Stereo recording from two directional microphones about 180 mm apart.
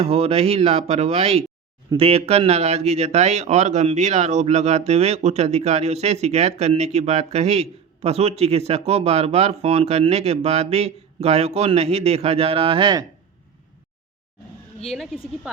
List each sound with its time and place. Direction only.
0.0 s speech: 35° right (ahead or behind)
14.8 s a woman's voice: centre (ahead or behind)